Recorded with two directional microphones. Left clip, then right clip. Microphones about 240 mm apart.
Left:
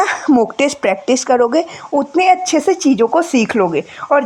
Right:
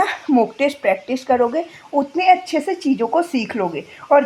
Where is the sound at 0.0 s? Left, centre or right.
Left.